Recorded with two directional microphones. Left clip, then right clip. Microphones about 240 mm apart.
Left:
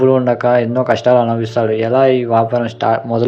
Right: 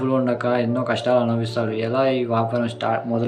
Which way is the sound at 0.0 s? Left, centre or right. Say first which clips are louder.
Left 9 dB; centre.